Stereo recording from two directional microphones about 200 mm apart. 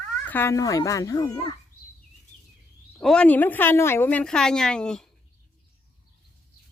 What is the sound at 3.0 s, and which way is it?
A woman's voice, 5° left (ahead or behind).